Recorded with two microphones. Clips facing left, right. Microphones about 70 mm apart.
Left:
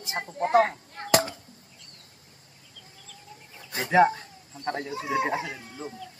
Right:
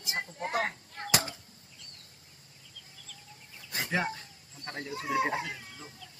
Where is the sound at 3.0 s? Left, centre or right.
Left.